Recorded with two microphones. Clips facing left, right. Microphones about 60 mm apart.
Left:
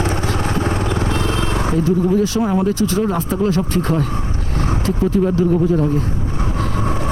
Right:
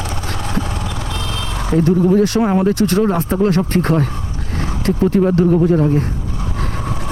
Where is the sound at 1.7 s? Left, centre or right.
Right.